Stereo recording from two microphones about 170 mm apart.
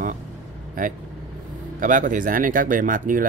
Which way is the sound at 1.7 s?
50° right (ahead or behind).